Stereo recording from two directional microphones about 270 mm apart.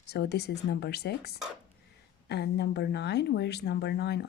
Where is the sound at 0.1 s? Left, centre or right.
Left.